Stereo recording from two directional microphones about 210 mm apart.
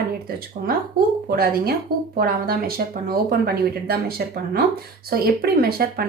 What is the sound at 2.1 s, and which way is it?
Speech, 45° right (ahead or behind).